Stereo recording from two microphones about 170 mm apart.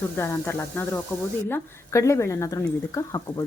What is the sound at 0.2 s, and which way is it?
Speech, 10° left (ahead or behind).